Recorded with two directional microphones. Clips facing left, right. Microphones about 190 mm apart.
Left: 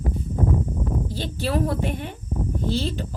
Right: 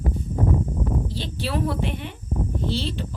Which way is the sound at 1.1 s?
45° left (ahead or behind).